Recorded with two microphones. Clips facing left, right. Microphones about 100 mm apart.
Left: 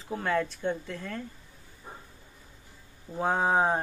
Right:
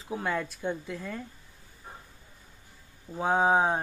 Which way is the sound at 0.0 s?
5° right (ahead or behind).